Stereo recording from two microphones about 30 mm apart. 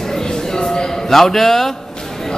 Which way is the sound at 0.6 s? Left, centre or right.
Left.